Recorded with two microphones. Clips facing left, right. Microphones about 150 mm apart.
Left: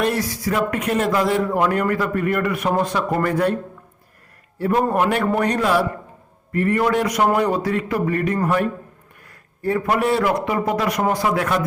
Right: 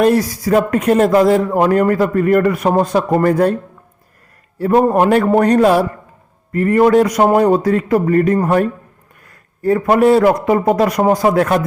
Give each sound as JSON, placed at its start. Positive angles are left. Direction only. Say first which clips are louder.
{"t": 0.0, "sound": "speech", "louder": "right 8 dB", "side_deg": -40}
{"t": 4.5, "sound": "speech", "louder": "right 6 dB", "side_deg": -40}
{"t": 9.6, "sound": "speech", "louder": "right 8 dB", "side_deg": -35}